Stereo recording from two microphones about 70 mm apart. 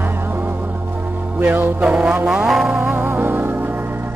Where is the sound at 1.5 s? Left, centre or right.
Right.